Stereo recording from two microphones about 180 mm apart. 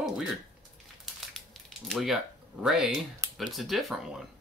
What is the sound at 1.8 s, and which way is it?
Speech, centre (ahead or behind).